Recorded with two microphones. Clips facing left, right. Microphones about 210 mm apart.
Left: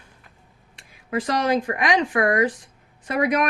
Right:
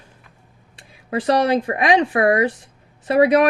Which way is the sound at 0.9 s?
30° right (ahead or behind).